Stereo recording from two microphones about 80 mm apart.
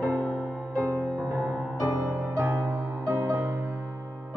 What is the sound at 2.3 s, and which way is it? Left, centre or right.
Music, right.